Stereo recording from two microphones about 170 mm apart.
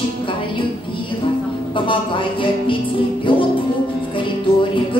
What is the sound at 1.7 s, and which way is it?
Music, 30° left (ahead or behind).